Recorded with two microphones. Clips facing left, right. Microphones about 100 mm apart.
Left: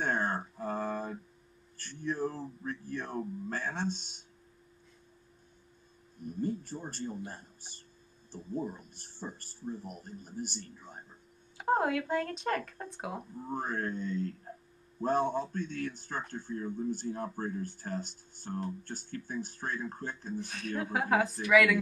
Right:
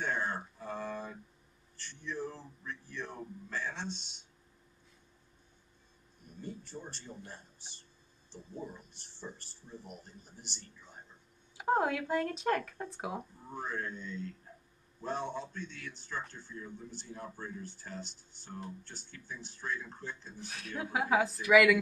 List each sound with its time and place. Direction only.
0.0 s a sound: 45° left (ahead or behind)
1.8 s speech: 45° left (ahead or behind)
6.4 s speech: 45° left (ahead or behind)
11.5 s speech: centre (ahead or behind)
13.5 s speech: 45° left (ahead or behind)
20.3 s speech: centre (ahead or behind)